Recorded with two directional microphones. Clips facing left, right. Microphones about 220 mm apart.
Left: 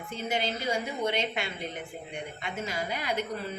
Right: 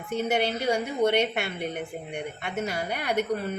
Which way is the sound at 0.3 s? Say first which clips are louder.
Right 4 dB; 65° right (ahead or behind).